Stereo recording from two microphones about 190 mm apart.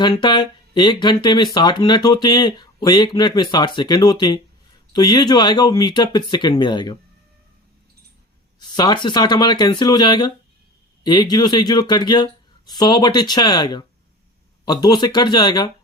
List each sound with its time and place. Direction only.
0.0 s speech: 25° left (ahead or behind)
8.5 s speech: 20° left (ahead or behind)